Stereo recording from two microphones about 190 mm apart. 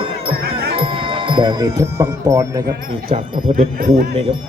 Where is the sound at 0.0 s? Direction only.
30° right (ahead or behind).